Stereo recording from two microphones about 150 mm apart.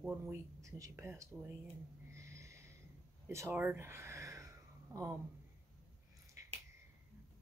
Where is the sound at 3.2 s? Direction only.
15° right (ahead or behind).